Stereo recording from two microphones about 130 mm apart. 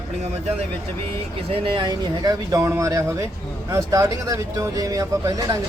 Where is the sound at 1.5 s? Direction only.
40° right (ahead or behind).